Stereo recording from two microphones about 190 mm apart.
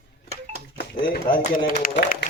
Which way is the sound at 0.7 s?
55° left (ahead or behind).